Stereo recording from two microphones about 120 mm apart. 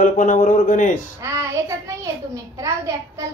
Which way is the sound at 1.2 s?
25° right (ahead or behind).